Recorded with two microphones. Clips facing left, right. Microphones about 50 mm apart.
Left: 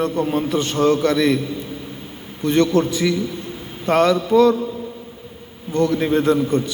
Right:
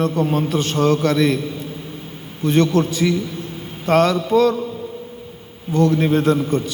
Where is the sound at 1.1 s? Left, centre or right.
Centre.